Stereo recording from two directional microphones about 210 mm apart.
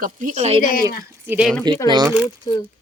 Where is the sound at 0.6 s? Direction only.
45° left (ahead or behind).